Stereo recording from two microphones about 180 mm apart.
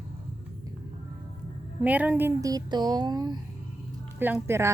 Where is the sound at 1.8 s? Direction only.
10° right (ahead or behind).